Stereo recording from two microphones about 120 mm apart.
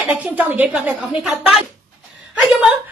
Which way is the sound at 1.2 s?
5° right (ahead or behind).